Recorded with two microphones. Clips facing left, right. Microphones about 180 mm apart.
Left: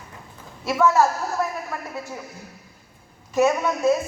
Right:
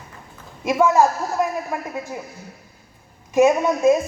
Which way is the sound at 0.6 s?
15° right (ahead or behind).